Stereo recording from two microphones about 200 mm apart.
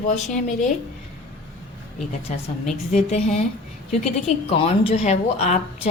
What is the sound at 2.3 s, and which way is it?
Speech, 35° left (ahead or behind).